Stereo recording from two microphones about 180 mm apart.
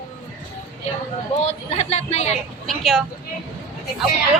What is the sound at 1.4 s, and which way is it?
Speech, 35° left (ahead or behind).